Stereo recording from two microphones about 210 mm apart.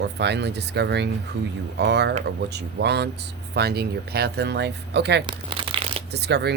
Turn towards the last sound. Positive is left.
turn(degrees=-50)  # may be behind; listen again after turning